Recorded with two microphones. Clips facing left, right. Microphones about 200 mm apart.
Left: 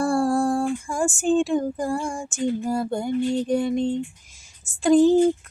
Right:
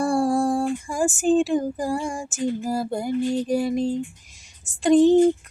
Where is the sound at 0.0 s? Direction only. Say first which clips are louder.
Even; centre (ahead or behind).